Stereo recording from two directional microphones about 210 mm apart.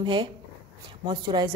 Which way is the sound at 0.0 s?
20° right (ahead or behind).